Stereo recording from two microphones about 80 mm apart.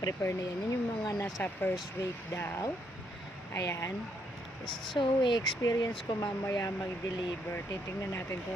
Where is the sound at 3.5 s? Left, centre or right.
Left.